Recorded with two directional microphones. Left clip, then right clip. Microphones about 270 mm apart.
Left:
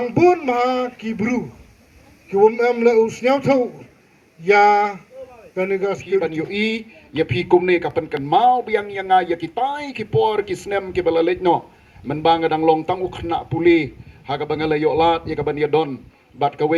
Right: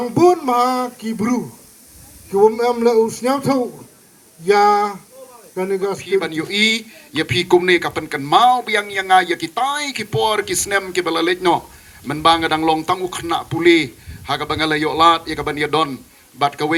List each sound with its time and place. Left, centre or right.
0.0 s a man's voice: right